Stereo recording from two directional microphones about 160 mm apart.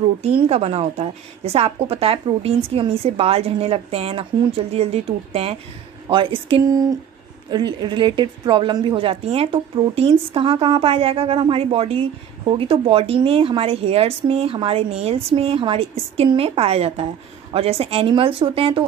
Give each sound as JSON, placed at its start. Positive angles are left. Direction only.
{"t": 0.2, "sound": "speech", "side_deg": -40}
{"t": 6.7, "sound": "speech", "side_deg": -20}